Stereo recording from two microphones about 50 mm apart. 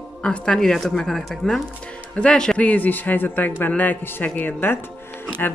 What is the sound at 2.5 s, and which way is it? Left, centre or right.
A man's voice, left.